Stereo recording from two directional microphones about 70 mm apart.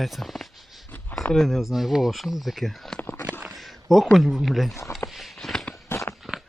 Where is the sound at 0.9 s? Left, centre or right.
Left.